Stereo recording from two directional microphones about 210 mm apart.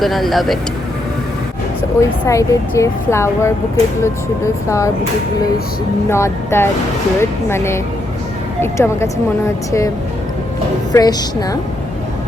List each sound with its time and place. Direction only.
0.0 s speech: centre (ahead or behind)
2.0 s speech: 15° left (ahead or behind)
6.1 s speech: 10° left (ahead or behind)
10.9 s speech: 15° left (ahead or behind)